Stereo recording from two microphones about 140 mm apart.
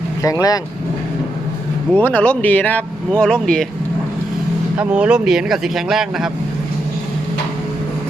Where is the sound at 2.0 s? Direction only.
10° left (ahead or behind).